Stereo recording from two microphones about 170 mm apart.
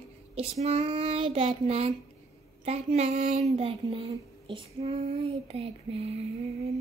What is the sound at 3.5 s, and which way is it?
Child singing, 35° right (ahead or behind).